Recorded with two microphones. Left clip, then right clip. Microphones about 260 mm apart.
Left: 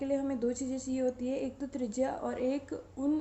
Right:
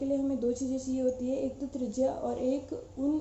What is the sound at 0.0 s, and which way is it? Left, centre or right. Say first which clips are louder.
A woman's voice: right 2 dB; left.